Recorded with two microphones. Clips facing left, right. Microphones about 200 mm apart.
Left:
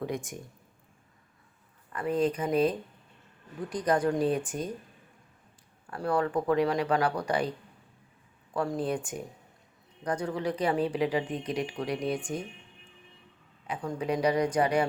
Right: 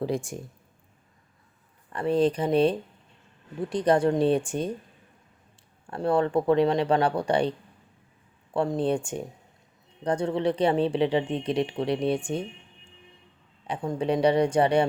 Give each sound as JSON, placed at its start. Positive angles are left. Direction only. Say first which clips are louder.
{"t": 0.0, "sound": "speech", "louder": "right 5 dB", "side_deg": -30}
{"t": 1.9, "sound": "speech", "louder": "right 5 dB", "side_deg": -30}
{"t": 5.9, "sound": "speech", "louder": "right 5 dB", "side_deg": -25}
{"t": 8.5, "sound": "speech", "louder": "right 5 dB", "side_deg": -25}
{"t": 13.7, "sound": "speech", "louder": "right 4 dB", "side_deg": -30}